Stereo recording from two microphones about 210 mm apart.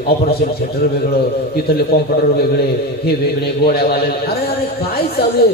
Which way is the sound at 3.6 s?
50° left (ahead or behind).